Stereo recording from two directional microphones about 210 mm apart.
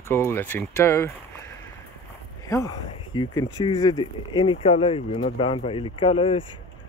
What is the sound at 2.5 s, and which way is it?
Speech, 15° left (ahead or behind).